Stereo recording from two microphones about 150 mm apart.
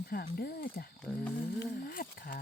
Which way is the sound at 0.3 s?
90° left.